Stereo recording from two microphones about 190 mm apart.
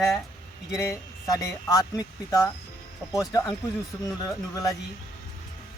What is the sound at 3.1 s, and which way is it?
Music, 15° left (ahead or behind).